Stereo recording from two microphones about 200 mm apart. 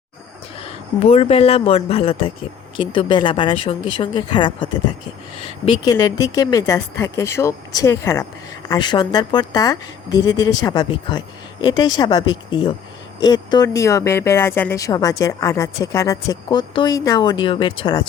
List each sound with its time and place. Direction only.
0.6 s speech: 30° left (ahead or behind)